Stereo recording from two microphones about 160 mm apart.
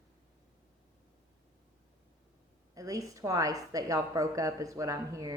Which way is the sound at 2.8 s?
20° right (ahead or behind).